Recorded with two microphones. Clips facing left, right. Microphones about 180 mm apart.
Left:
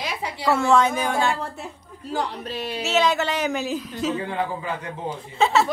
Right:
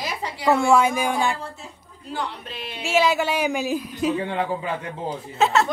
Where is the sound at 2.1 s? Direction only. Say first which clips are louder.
Left 3 dB; 40° left (ahead or behind).